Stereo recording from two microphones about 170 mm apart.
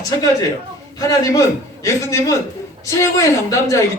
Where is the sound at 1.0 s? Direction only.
20° left (ahead or behind).